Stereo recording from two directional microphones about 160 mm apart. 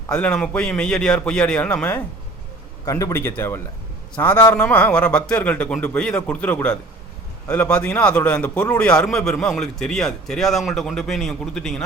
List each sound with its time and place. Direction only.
0.1 s speech: 5° left (ahead or behind)